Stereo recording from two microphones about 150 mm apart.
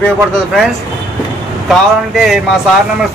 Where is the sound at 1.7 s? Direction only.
Centre (ahead or behind).